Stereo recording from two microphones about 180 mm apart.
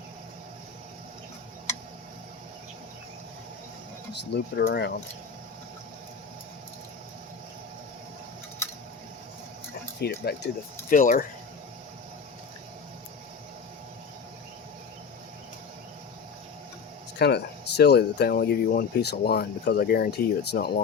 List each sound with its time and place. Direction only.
4.1 s speech: 70° left (ahead or behind)
10.0 s speech: 65° left (ahead or behind); by 11.3 s 50° left (ahead or behind)
17.2 s speech: 65° left (ahead or behind)